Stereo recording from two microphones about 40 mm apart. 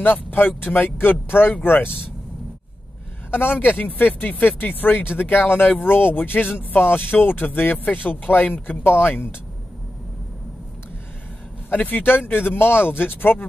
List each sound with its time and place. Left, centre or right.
0.0 s speech: left
3.3 s speech: left
4.4 s speech: left
6.4 s speech: left
8.6 s speech: left
11.7 s speech: left
12.3 s speech: left